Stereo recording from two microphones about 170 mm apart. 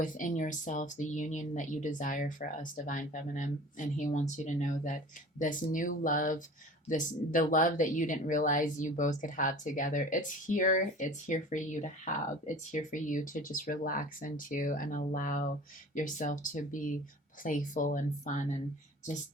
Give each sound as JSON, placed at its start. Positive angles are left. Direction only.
{"t": 0.0, "sound": "speech", "side_deg": 50}